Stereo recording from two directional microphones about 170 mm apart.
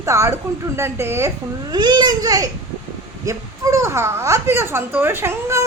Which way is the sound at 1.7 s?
25° right (ahead or behind).